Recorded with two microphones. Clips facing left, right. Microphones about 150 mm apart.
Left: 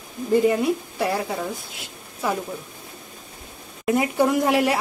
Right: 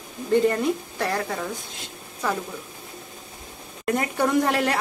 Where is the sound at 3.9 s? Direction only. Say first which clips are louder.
Left 3 dB; 10° left (ahead or behind).